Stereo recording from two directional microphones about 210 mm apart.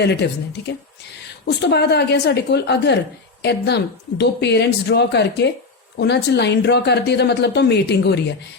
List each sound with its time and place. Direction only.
0.0 s speech: 55° left (ahead or behind)
1.5 s speech: 50° left (ahead or behind)